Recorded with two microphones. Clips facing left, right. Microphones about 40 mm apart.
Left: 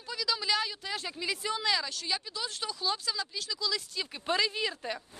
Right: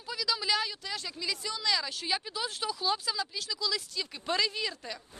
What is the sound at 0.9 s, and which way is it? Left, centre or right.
Speech, centre.